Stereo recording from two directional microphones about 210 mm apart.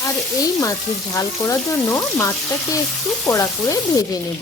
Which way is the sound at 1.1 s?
15° left (ahead or behind).